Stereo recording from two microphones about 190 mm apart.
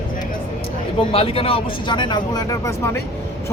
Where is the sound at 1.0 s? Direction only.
30° left (ahead or behind).